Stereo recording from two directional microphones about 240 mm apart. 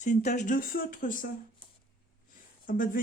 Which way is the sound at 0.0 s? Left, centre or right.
Left.